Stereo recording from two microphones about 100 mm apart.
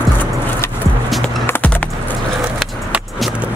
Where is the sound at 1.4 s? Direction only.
20° left (ahead or behind).